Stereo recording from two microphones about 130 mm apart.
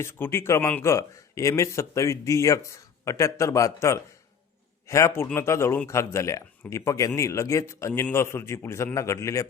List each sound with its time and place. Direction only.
0.0 s speech: 20° left (ahead or behind)